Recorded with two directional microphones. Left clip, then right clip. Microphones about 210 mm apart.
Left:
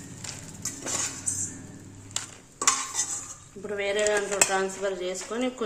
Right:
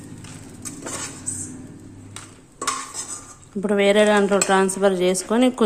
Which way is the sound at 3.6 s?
55° right (ahead or behind).